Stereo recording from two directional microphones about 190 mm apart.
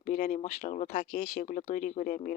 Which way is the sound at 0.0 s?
45° left (ahead or behind).